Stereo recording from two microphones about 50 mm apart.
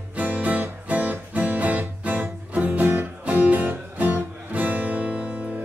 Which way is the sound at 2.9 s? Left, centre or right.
Right.